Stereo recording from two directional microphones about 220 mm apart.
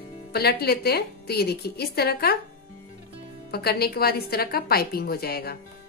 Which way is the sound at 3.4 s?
45° left (ahead or behind).